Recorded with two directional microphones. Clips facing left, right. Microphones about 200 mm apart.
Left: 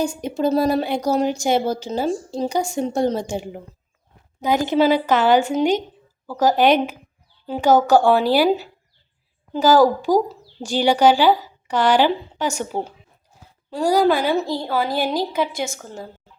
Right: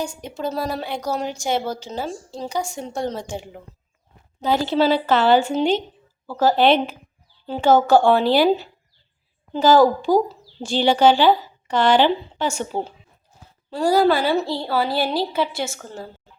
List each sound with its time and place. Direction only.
0.0 s a woman's voice: 15° left (ahead or behind)
2.7 s speech: 45° left (ahead or behind)
3.1 s a woman's voice: 15° left (ahead or behind)